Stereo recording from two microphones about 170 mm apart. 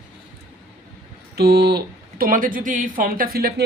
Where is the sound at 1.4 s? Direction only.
70° right (ahead or behind).